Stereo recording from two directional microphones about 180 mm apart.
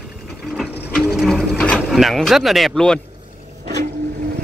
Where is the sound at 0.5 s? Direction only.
Centre (ahead or behind).